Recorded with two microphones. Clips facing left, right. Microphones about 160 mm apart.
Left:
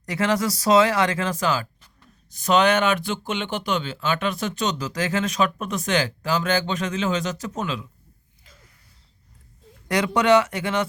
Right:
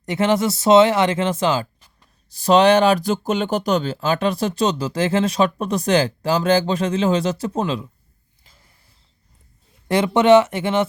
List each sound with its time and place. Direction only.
0.0 s speech: 25° right (ahead or behind)
9.9 s speech: 25° right (ahead or behind)